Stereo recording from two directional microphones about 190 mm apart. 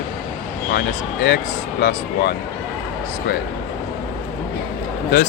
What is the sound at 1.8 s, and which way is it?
Speech, 55° left (ahead or behind).